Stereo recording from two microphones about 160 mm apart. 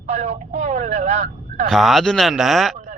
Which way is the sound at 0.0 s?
45° right (ahead or behind).